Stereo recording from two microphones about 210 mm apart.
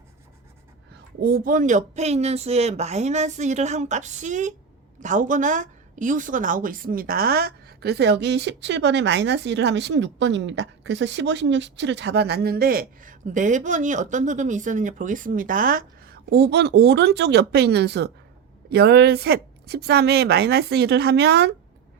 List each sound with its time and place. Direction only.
1.2 s a woman's voice: 45° right (ahead or behind)